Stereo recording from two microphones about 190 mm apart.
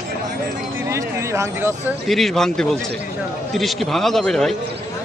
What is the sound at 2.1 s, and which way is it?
Speech, centre (ahead or behind).